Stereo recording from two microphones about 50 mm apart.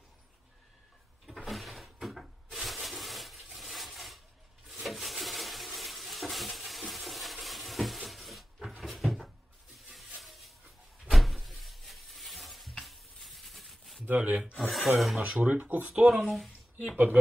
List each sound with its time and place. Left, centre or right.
1.2 s cupboard open or close: centre
4.6 s a sound: centre
9.8 s music: centre
11.1 s a sound: centre
14.0 s speech: right
14.6 s speech: centre
15.1 s speech: right
15.9 s speech: centre
16.3 s a sound: centre
16.9 s speech: right